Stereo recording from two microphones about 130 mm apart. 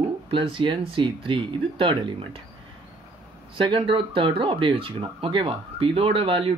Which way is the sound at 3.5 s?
40° right (ahead or behind).